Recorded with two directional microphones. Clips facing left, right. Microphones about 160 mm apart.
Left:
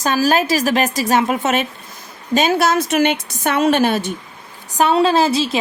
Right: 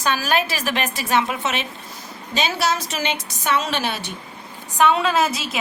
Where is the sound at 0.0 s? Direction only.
40° left (ahead or behind).